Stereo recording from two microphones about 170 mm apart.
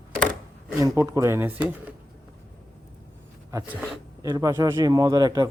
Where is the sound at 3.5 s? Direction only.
20° right (ahead or behind).